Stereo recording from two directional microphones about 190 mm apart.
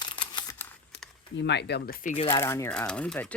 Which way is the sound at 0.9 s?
60° left (ahead or behind).